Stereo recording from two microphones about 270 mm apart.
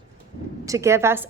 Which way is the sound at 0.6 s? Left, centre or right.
Centre.